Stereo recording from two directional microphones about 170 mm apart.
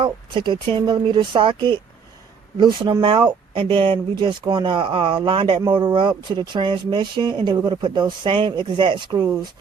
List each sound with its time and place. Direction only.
0.0 s speech: 30° right (ahead or behind)